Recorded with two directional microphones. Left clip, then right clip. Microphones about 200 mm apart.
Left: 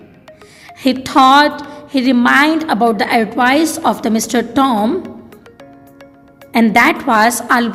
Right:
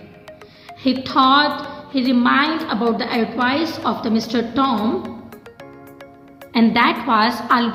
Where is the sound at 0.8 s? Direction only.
50° left (ahead or behind).